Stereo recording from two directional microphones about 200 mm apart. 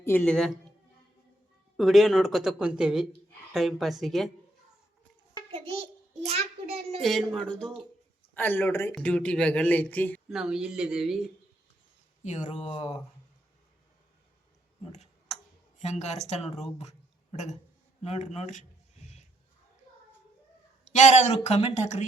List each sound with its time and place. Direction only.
0.0 s speech: 10° left (ahead or behind)
1.7 s speech: centre (ahead or behind)
5.5 s a child's voice: 25° right (ahead or behind)
7.0 s speech: centre (ahead or behind)
10.3 s speech: 5° right (ahead or behind)
12.2 s a woman's voice: 35° left (ahead or behind)
15.8 s a woman's voice: 35° left (ahead or behind)
20.8 s a woman's voice: 35° left (ahead or behind)